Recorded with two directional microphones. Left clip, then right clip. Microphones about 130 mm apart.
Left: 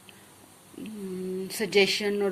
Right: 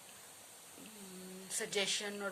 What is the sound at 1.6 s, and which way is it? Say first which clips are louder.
Speech: left 13 dB; 25° left (ahead or behind).